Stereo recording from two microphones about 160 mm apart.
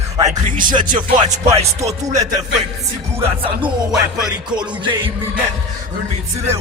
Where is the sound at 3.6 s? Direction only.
5° right (ahead or behind).